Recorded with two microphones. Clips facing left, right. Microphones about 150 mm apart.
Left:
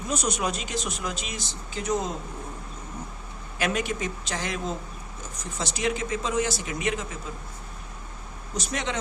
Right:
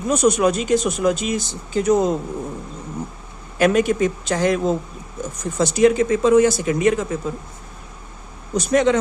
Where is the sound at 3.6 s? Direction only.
50° right (ahead or behind).